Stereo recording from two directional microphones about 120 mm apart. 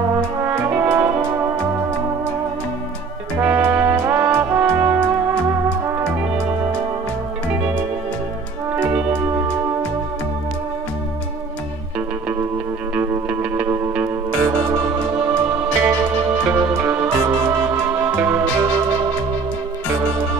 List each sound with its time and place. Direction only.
0.5 s brass instrument: 20° right (ahead or behind)
3.3 s brass instrument: 15° right (ahead or behind)
8.7 s music: 15° right (ahead or behind)
12.9 s music: 15° right (ahead or behind)
15.5 s music: 15° right (ahead or behind)